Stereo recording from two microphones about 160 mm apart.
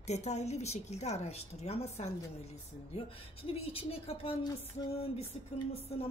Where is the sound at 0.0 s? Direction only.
45° left (ahead or behind).